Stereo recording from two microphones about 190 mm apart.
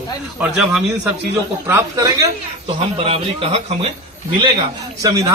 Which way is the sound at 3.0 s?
30° right (ahead or behind).